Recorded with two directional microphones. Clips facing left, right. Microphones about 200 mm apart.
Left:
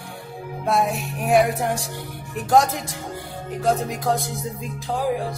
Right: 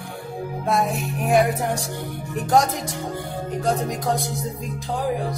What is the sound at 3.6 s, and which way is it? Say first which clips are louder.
Music: left 2 dB; centre (ahead or behind).